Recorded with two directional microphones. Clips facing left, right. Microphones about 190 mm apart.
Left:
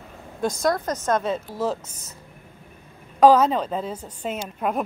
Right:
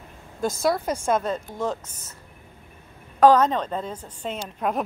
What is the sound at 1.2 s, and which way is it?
Speech, 5° left (ahead or behind).